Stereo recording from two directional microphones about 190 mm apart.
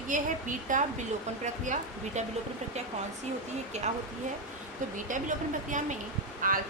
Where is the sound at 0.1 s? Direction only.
40° right (ahead or behind).